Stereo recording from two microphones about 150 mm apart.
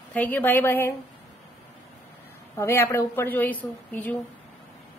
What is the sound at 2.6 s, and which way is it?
A woman's voice, 15° left (ahead or behind).